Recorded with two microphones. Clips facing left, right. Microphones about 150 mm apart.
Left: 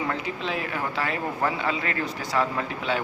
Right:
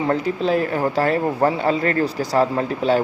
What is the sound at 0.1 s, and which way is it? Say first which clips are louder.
Speech: right 10 dB; 40° right (ahead or behind).